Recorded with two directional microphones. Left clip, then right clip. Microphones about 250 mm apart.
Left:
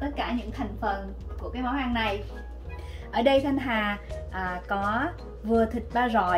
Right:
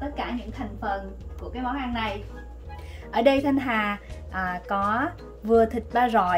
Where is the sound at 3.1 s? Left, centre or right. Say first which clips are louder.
Right 2 dB; right.